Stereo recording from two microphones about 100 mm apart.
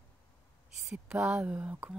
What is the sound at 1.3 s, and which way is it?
Speech, 15° right (ahead or behind).